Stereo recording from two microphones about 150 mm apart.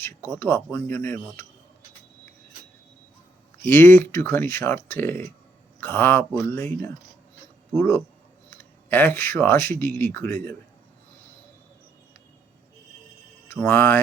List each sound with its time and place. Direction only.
0.0 s speech: 15° left (ahead or behind)
3.6 s speech: 15° left (ahead or behind)
13.5 s speech: 15° left (ahead or behind)